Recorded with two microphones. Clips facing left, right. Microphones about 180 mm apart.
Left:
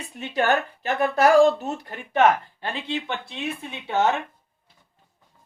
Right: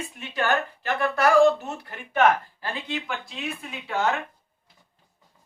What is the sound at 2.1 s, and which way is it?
Speech, 25° left (ahead or behind).